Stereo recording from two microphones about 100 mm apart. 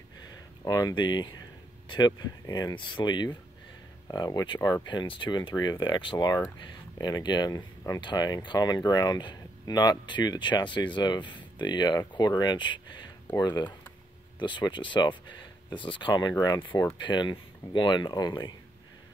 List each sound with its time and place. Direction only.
0.7 s speech: 35° left (ahead or behind)
0.9 s speech: 50° left (ahead or behind)
2.7 s speech: 55° left (ahead or behind); by 4.8 s 30° left (ahead or behind)
4.8 s speech: 55° left (ahead or behind)
16.1 s speech: 40° left (ahead or behind)